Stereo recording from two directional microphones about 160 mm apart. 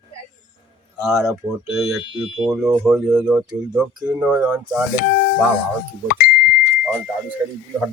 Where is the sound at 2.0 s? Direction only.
30° left (ahead or behind).